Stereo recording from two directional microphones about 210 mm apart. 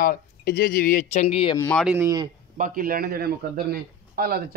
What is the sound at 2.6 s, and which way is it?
A man's voice, 40° right (ahead or behind).